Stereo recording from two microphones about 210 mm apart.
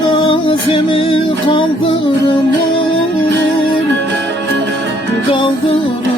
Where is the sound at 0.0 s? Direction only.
20° left (ahead or behind).